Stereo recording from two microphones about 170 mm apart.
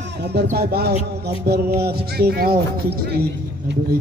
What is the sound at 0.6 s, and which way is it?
Speech, 70° right (ahead or behind).